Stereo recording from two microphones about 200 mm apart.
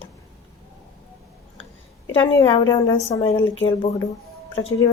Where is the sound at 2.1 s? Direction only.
25° left (ahead or behind).